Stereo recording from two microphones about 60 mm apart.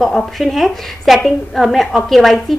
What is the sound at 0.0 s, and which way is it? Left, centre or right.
A woman's voice, centre.